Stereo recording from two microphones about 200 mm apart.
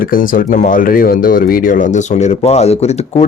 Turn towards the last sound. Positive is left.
turn(degrees=35)  # may be behind; listen again after turning